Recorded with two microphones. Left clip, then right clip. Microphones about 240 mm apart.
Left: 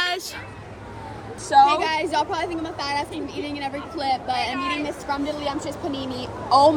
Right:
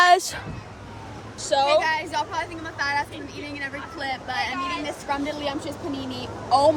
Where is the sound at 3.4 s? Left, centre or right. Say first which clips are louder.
Left 2 dB; centre.